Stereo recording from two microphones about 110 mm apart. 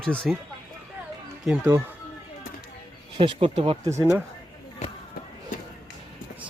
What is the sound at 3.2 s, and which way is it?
Speech, 50° right (ahead or behind).